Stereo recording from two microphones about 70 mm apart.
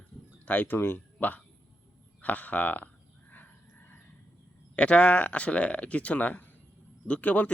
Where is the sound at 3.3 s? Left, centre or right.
Left.